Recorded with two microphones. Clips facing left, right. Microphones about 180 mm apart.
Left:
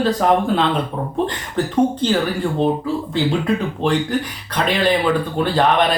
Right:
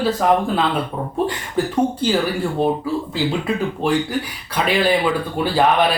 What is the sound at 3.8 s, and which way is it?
Speech, 10° right (ahead or behind).